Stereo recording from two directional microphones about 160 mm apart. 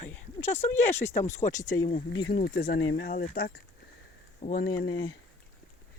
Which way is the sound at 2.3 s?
70° left (ahead or behind).